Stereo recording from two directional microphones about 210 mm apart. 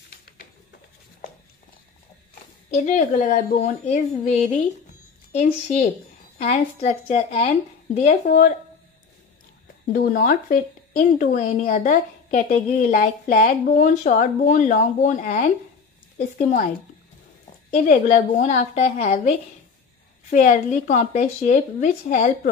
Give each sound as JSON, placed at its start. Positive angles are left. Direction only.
{"t": 2.8, "sound": "a woman's voice", "side_deg": 35}
{"t": 9.9, "sound": "a woman's voice", "side_deg": 40}
{"t": 16.2, "sound": "speech", "side_deg": 45}
{"t": 17.8, "sound": "a woman's voice", "side_deg": 35}